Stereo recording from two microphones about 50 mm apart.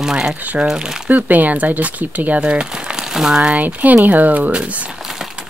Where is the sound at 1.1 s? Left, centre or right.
Right.